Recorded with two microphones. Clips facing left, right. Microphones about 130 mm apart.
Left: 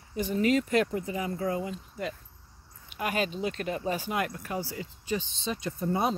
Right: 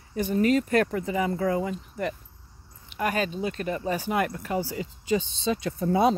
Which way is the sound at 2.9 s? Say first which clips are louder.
Right 3 dB; 45° right (ahead or behind).